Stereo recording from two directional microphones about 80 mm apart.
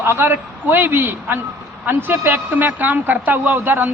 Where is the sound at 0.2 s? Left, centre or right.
Right.